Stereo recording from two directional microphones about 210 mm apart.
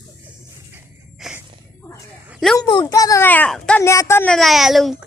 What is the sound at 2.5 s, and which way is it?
A child's voice, 15° left (ahead or behind).